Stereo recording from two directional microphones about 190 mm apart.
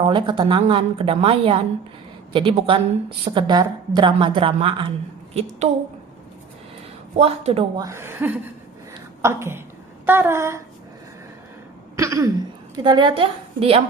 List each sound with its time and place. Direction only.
0.0 s a woman's voice: 25° right (ahead or behind)
7.2 s speech: 30° right (ahead or behind)
7.8 s speech: 15° right (ahead or behind)
11.9 s throat clearing: 15° right (ahead or behind)
12.7 s a woman's voice: 25° right (ahead or behind)